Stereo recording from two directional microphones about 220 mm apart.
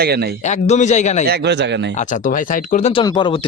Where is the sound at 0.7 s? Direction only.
30° left (ahead or behind).